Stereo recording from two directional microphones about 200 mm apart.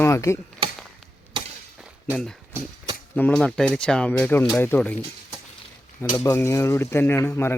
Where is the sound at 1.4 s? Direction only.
25° right (ahead or behind).